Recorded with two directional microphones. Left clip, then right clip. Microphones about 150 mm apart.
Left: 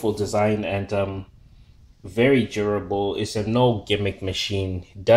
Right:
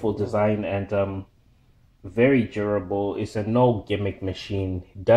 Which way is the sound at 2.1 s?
25° left (ahead or behind).